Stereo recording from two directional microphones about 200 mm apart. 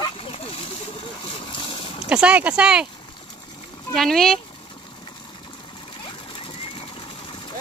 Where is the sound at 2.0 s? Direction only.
5° right (ahead or behind).